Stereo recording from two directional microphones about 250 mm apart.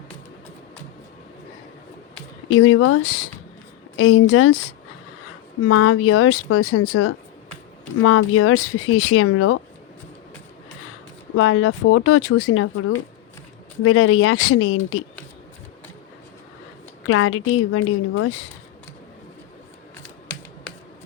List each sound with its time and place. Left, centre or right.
2.1 s a woman's voice: left
5.6 s speech: left
11.3 s speech: left
13.8 s speech: left
17.0 s speech: left